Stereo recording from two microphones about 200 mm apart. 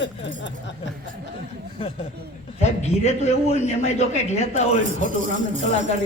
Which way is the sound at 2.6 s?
35° left (ahead or behind).